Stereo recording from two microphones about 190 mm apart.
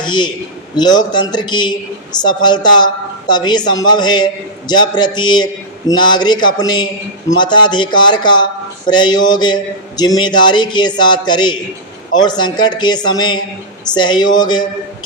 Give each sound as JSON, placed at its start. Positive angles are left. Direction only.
{"t": 0.0, "sound": "a woman's voice", "side_deg": 25}